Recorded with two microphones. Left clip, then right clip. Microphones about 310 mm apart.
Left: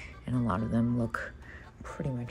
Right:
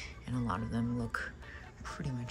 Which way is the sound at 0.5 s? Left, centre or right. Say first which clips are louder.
Left 6 dB; left.